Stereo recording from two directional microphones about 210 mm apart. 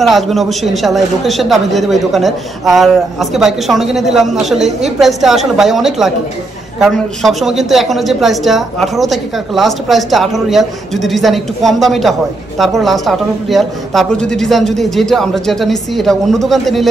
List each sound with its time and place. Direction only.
0.0 s speech: centre (ahead or behind)